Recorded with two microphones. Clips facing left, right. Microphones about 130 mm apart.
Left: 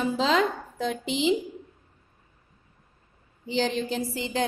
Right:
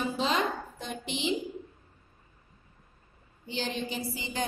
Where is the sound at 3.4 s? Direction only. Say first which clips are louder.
Left 7 dB; 90° left.